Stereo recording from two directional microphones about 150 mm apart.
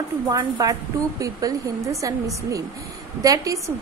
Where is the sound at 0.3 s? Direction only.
25° right (ahead or behind).